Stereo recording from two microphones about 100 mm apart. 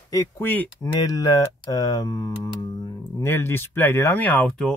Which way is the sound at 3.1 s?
25° left (ahead or behind).